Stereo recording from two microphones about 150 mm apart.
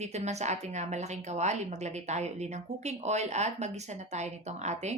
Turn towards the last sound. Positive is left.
turn(degrees=-50)  # may be behind; listen again after turning